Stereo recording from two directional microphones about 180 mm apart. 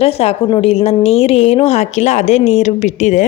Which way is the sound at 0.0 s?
35° left (ahead or behind).